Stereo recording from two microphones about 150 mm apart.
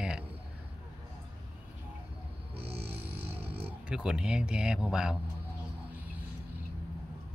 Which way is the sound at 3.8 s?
5° right (ahead or behind).